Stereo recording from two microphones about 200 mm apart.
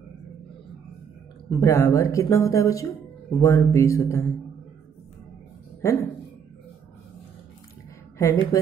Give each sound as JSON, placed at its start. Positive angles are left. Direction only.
{"t": 1.5, "sound": "speech", "side_deg": 15}
{"t": 5.8, "sound": "a sound", "side_deg": 15}
{"t": 8.2, "sound": "speech", "side_deg": 15}